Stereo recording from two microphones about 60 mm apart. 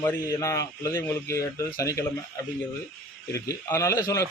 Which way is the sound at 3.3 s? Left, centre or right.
Left.